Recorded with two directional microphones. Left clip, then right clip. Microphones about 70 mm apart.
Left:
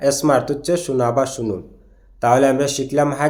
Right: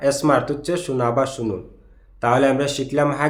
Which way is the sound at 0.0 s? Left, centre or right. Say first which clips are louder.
Left 2 dB; left.